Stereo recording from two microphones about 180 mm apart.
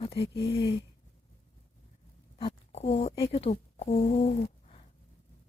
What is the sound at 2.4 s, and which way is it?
Speech, 35° left (ahead or behind).